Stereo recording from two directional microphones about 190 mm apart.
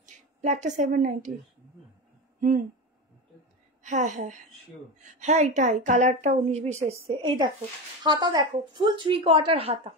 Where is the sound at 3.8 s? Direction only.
40° right (ahead or behind).